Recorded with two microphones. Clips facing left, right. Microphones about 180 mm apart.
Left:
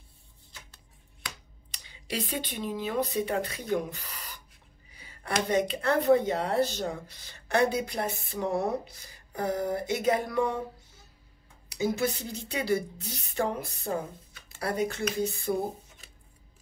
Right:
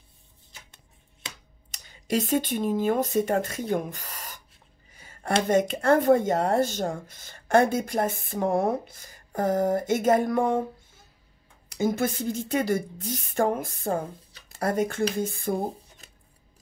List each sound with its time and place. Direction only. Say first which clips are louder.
1.7 s speech: right 9 dB; 45° right (ahead or behind)
4.9 s a sound: right 8 dB; 50° right (ahead or behind)
5.5 s speech: right 5 dB; 45° right (ahead or behind)
11.7 s speech: right 3 dB; 50° right (ahead or behind)
14.3 s a sound: right 5 dB; 45° right (ahead or behind)
15.1 s speech: right 1 dB; 50° right (ahead or behind)